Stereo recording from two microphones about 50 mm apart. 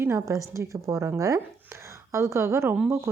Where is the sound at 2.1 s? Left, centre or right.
Right.